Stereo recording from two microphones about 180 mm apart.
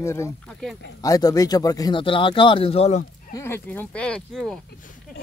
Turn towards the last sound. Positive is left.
turn(degrees=0)  # may be behind; listen again after turning